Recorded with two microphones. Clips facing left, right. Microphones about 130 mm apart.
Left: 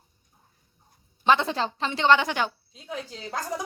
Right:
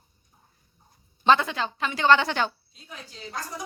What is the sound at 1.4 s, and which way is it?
A woman's voice, 35° left (ahead or behind).